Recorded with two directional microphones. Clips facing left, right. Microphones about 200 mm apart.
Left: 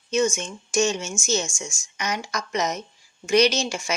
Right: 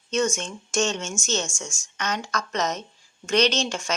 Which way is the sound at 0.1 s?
5° left (ahead or behind).